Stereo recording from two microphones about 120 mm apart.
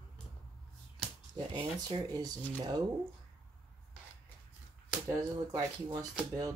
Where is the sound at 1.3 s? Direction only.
45° right (ahead or behind).